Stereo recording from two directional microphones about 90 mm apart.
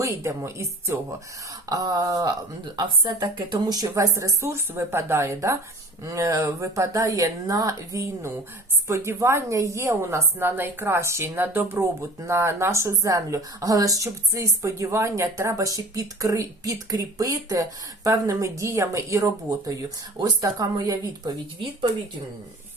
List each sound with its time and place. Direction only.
0.0 s speech: 30° right (ahead or behind)
1.7 s a woman's voice: 45° right (ahead or behind)